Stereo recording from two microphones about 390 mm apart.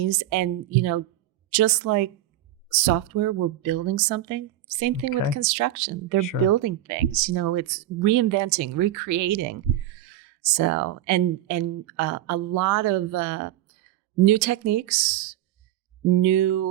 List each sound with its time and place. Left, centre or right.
0.0 s speech: right
16.2 s speech: right